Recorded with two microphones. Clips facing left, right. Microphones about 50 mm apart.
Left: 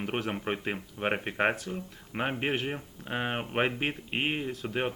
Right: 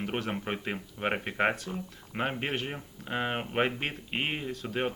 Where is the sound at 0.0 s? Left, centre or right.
Centre.